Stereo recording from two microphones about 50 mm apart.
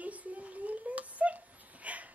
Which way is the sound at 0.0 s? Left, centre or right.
Right.